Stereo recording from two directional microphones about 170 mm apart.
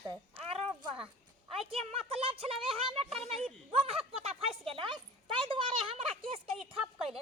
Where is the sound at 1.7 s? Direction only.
35° right (ahead or behind).